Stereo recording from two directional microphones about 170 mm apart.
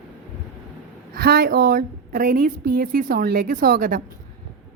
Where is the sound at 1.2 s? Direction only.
65° right (ahead or behind).